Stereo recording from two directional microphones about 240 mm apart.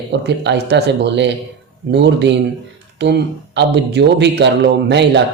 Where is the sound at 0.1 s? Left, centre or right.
Right.